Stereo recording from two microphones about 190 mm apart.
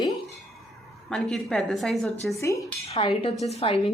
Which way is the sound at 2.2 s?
15° left (ahead or behind).